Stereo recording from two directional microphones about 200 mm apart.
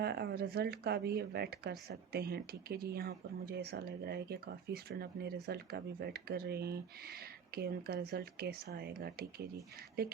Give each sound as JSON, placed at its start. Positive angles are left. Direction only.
{"t": 0.0, "sound": "speech", "side_deg": -55}